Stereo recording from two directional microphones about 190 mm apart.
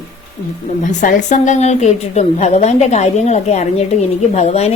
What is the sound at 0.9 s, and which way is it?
A woman's voice, 40° left (ahead or behind).